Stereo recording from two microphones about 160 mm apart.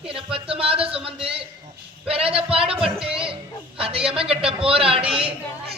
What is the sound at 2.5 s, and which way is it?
Music, 5° right (ahead or behind).